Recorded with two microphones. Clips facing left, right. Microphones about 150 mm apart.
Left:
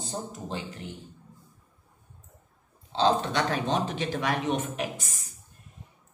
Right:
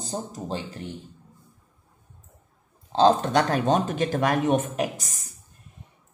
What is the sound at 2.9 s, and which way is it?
Speech, 45° right (ahead or behind).